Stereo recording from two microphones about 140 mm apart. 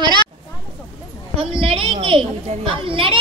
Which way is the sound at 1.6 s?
40° right (ahead or behind).